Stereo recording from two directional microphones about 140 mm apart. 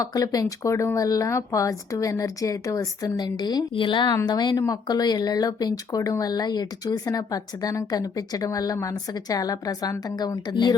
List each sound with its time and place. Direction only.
0.0 s speech: 25° left (ahead or behind)